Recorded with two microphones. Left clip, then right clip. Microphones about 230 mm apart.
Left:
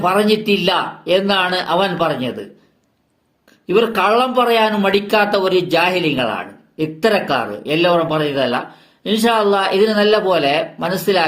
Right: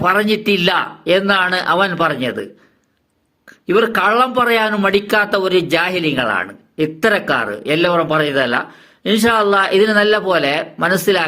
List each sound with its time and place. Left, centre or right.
0.0 s a man's voice: right
3.7 s a man's voice: right